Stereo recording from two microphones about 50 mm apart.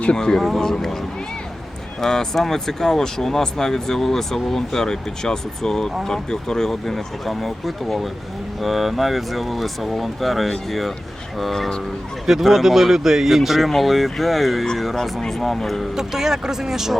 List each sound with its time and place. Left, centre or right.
0.0 s speech: centre
2.0 s speech: centre
16.0 s speech: centre